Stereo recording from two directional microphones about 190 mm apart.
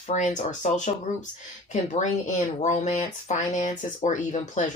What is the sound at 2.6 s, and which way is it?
Speech, 40° left (ahead or behind).